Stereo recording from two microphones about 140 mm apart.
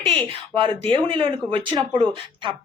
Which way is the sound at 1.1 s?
40° right (ahead or behind).